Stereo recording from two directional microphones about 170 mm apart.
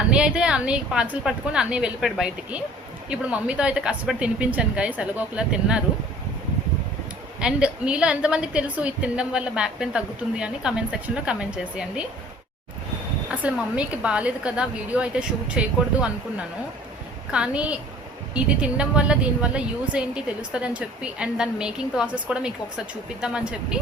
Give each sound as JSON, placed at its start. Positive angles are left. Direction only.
{"t": 0.1, "sound": "a woman's voice", "side_deg": -5}
{"t": 7.3, "sound": "a woman's voice", "side_deg": -5}
{"t": 13.4, "sound": "a woman's voice", "side_deg": -5}
{"t": 17.3, "sound": "a woman's voice", "side_deg": -5}